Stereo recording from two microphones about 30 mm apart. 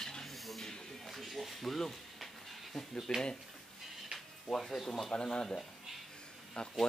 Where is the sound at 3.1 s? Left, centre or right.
Left.